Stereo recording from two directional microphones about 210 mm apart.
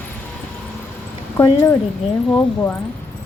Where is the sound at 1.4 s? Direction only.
15° left (ahead or behind).